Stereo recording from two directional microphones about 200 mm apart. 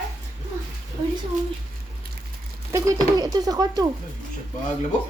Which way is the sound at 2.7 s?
15° right (ahead or behind).